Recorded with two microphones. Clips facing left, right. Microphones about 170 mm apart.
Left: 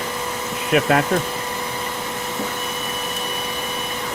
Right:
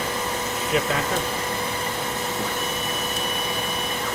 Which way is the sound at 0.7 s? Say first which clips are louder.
Left 7 dB; 65° left (ahead or behind).